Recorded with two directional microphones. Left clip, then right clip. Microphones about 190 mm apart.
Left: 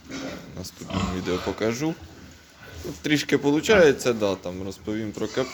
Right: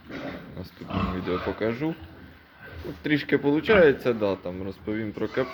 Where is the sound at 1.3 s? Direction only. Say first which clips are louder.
Left 2 dB; 15° left (ahead or behind).